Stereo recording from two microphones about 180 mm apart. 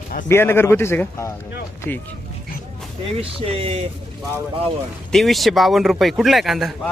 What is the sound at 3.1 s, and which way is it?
Speech, 30° right (ahead or behind).